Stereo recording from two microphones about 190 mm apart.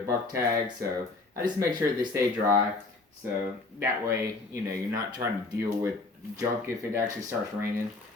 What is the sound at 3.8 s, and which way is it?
Speech, 15° right (ahead or behind).